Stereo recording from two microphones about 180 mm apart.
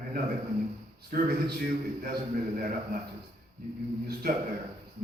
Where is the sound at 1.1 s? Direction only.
55° right (ahead or behind).